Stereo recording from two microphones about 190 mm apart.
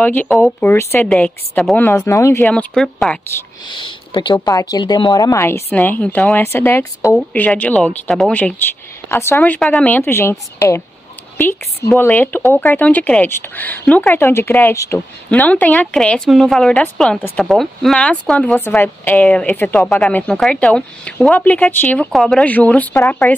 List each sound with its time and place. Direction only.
0.0 s speech: 10° left (ahead or behind)
2.4 s speech: 5° left (ahead or behind)
3.6 s speech: 25° left (ahead or behind)
12.0 s speech: 10° left (ahead or behind)